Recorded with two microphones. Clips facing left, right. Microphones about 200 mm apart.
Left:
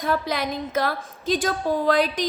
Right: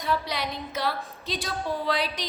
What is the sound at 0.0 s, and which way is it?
A woman's voice, 50° left (ahead or behind).